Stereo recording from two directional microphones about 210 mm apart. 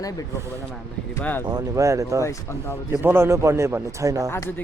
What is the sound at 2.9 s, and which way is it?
A man's voice, 10° right (ahead or behind).